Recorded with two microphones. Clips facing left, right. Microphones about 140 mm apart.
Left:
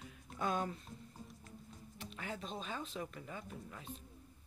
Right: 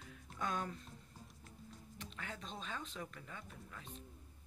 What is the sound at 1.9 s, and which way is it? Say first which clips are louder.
Speech: left 4 dB; 15° left (ahead or behind).